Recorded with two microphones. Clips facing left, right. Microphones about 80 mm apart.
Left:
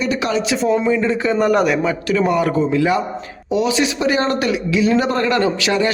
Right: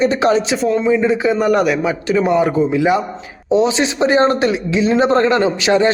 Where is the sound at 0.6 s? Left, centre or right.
Centre.